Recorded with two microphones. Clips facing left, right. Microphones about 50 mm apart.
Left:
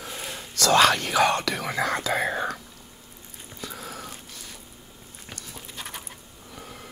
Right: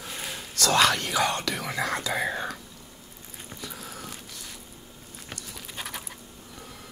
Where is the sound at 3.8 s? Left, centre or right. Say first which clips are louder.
Left 3 dB; left.